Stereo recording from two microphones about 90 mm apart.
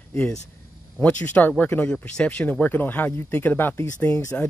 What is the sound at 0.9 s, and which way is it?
Speech, 20° left (ahead or behind).